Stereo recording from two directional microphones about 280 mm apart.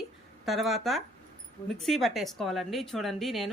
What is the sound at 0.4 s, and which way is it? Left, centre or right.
A woman's voice, centre.